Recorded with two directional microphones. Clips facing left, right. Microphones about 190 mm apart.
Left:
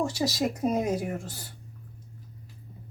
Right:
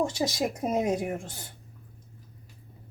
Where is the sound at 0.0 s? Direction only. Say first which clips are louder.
Even; 25° right (ahead or behind).